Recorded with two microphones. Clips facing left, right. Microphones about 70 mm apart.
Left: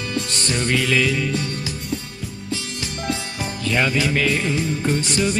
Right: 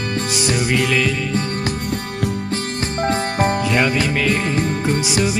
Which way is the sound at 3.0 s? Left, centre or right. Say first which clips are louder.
Right 9 dB; right.